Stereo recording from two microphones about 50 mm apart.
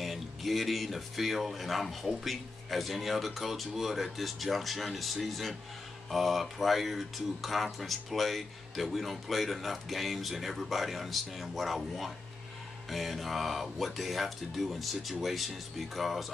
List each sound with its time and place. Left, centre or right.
0.0 s speech: centre